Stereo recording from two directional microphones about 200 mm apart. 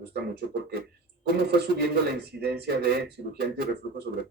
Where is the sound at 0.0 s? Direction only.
55° right (ahead or behind).